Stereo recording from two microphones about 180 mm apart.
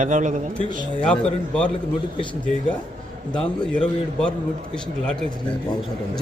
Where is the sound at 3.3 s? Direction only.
5° left (ahead or behind).